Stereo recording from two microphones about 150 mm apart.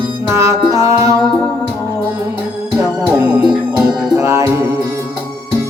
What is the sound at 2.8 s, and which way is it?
Music, 20° right (ahead or behind).